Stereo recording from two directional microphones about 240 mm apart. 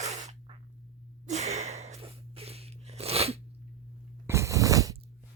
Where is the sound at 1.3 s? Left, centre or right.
Right.